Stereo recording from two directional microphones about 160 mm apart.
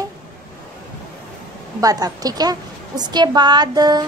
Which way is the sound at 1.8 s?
25° right (ahead or behind).